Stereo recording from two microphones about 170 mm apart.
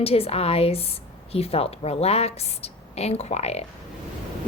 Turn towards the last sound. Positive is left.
turn(degrees=40)  # may be behind; listen again after turning